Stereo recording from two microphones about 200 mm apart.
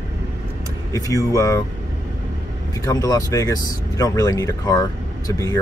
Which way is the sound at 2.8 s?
15° left (ahead or behind).